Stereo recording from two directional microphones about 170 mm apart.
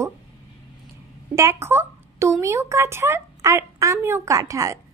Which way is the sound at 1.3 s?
15° right (ahead or behind).